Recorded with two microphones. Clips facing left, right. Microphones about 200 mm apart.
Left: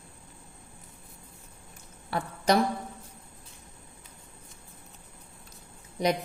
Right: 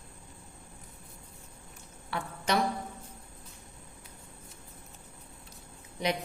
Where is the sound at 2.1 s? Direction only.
40° left (ahead or behind).